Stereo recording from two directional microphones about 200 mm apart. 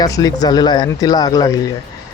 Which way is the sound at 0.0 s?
20° left (ahead or behind).